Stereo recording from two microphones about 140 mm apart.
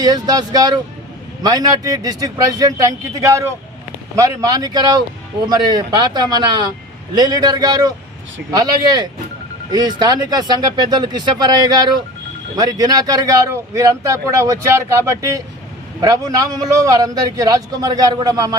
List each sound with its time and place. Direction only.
0.0 s speech: 30° right (ahead or behind)